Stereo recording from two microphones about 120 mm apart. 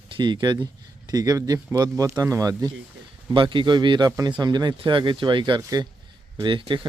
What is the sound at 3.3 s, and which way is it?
Speech, 45° right (ahead or behind).